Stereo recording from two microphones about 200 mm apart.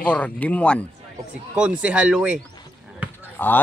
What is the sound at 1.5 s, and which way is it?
Speech, 5° right (ahead or behind).